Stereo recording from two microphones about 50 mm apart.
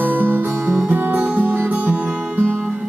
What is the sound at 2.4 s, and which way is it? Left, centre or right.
Music, left.